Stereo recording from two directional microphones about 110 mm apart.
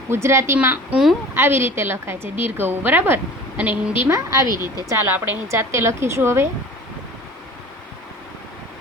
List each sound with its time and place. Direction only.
0.1 s a woman's voice: 25° right (ahead or behind)
4.0 s a woman's voice: 30° right (ahead or behind)